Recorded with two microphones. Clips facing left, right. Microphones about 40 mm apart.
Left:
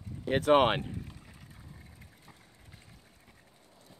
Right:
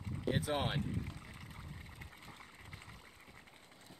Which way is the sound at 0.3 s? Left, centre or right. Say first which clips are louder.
Left 12 dB; left.